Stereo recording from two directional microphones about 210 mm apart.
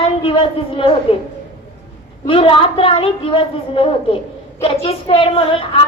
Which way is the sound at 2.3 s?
25° left (ahead or behind).